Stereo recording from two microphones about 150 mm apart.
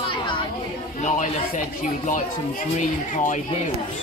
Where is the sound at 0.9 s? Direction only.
55° left (ahead or behind).